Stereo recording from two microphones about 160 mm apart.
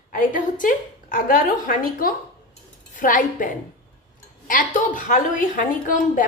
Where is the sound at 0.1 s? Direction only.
60° left (ahead or behind).